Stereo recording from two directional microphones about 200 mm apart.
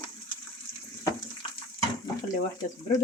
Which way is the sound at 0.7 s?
45° left (ahead or behind).